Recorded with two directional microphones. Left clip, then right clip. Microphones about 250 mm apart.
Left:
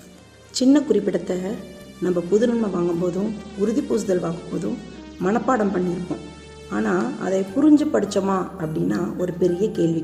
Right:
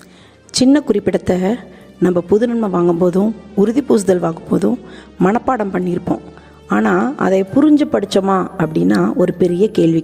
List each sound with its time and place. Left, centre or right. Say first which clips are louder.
0.5 s speech: right 5 dB; right